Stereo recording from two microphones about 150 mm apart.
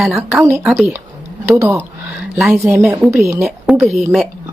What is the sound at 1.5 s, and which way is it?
Speech, 15° right (ahead or behind).